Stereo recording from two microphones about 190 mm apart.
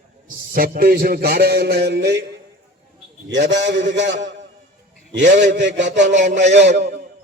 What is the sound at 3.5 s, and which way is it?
Speech, 70° right (ahead or behind).